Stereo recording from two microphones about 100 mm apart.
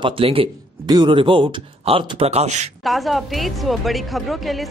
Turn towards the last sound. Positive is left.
turn(degrees=0)  # may be behind; listen again after turning